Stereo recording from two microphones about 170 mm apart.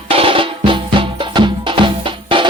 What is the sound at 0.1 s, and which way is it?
Music, 30° right (ahead or behind).